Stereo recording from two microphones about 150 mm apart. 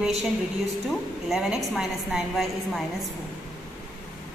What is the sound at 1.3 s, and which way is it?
A woman's voice, centre (ahead or behind).